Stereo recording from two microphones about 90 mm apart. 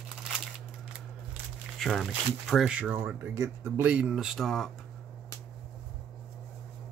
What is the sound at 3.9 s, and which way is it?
Speech, 15° right (ahead or behind).